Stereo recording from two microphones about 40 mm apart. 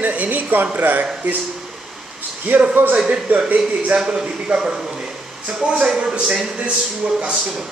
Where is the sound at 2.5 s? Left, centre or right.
Right.